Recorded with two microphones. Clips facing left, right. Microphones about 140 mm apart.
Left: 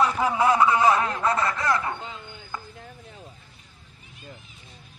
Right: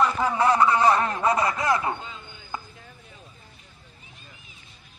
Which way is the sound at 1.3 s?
15° right (ahead or behind).